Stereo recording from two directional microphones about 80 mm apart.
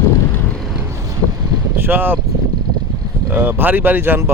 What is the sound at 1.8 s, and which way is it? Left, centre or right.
Speech, right.